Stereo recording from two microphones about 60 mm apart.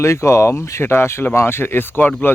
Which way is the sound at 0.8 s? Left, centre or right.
Left.